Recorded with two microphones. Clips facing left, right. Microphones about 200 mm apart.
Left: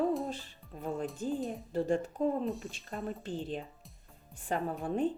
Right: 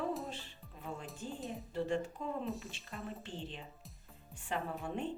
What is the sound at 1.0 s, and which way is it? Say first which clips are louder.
Speech: left 11 dB; centre (ahead or behind).